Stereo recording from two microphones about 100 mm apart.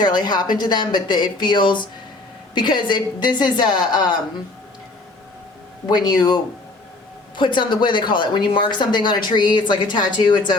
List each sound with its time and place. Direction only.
0.0 s speech: 45° left (ahead or behind)
6.1 s speech: 45° left (ahead or behind)